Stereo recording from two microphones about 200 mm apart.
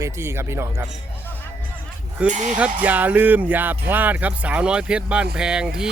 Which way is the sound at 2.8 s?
10° right (ahead or behind).